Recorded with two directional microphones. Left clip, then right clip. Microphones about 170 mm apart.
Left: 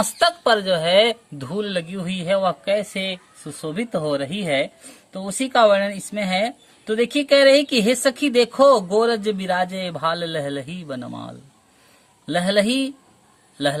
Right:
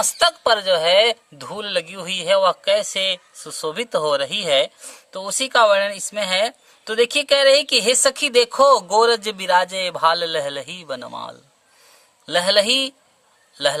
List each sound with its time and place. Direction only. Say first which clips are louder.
0.0 s a woman's voice: right 1 dB; 30° right (ahead or behind)